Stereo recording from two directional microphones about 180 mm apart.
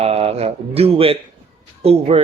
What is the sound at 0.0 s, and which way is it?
Speech, 35° right (ahead or behind).